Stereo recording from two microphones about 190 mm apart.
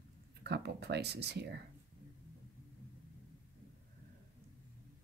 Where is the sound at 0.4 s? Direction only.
60° right (ahead or behind).